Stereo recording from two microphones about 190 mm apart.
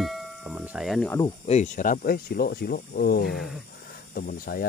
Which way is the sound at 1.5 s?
40° left (ahead or behind).